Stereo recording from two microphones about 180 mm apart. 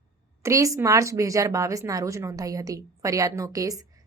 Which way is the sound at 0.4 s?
15° right (ahead or behind).